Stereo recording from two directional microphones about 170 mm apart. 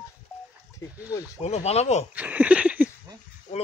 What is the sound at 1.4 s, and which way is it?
Speech, 40° left (ahead or behind).